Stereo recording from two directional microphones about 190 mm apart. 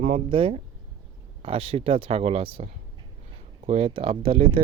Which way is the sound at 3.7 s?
30° right (ahead or behind).